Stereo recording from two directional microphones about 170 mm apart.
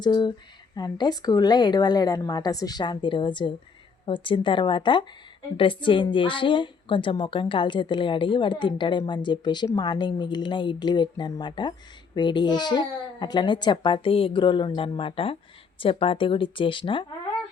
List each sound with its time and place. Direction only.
0.0 s a woman's voice: 25° left (ahead or behind)